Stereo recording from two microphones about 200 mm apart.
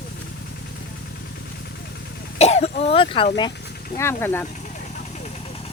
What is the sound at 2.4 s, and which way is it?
Speech, 30° left (ahead or behind).